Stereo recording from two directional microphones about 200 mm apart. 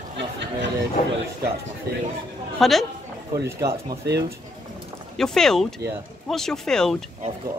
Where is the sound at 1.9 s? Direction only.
55° right (ahead or behind).